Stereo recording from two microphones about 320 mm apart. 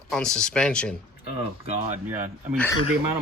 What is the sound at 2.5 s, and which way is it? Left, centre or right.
Speech, centre.